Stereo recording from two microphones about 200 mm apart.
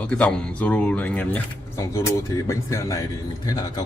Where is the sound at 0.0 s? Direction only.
5° left (ahead or behind).